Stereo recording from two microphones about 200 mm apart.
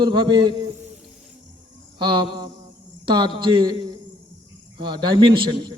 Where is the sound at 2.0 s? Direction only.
20° right (ahead or behind).